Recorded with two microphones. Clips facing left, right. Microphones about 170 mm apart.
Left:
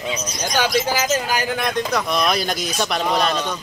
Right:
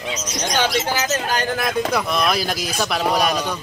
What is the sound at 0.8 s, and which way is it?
Speech, 15° left (ahead or behind).